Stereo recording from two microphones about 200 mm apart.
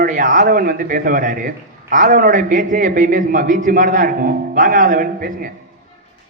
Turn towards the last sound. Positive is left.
turn(degrees=-45)  # may be behind; listen again after turning